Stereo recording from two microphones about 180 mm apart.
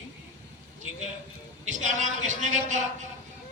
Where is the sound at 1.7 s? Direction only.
45° right (ahead or behind).